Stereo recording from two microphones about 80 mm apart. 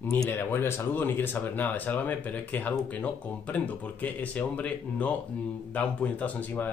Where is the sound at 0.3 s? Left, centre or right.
Left.